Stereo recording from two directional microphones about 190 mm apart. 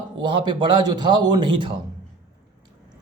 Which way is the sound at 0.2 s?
25° right (ahead or behind).